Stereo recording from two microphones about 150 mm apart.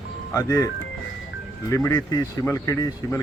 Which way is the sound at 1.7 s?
25° left (ahead or behind).